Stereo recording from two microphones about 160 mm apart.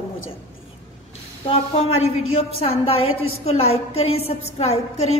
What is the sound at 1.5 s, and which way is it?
A woman's voice, 35° left (ahead or behind).